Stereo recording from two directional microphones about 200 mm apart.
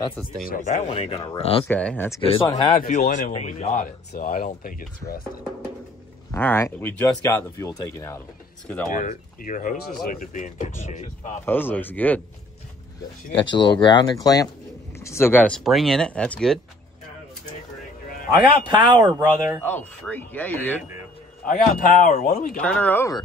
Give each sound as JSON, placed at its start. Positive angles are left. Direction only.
{"t": 0.5, "sound": "speech", "side_deg": 35}
{"t": 1.7, "sound": "speech", "side_deg": 10}
{"t": 2.2, "sound": "speech", "side_deg": 25}
{"t": 2.7, "sound": "speech", "side_deg": 40}
{"t": 6.3, "sound": "speech", "side_deg": 10}
{"t": 8.9, "sound": "speech", "side_deg": 40}
{"t": 11.4, "sound": "speech", "side_deg": 10}
{"t": 13.7, "sound": "speech", "side_deg": 20}
{"t": 18.3, "sound": "speech", "side_deg": -20}
{"t": 19.6, "sound": "speech", "side_deg": 10}
{"t": 21.5, "sound": "speech", "side_deg": 45}
{"t": 22.6, "sound": "speech", "side_deg": 5}